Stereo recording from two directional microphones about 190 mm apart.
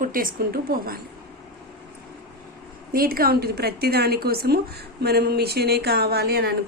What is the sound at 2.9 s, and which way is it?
A woman's voice, 50° right (ahead or behind).